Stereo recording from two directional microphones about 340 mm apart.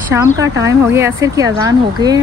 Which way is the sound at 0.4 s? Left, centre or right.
Centre.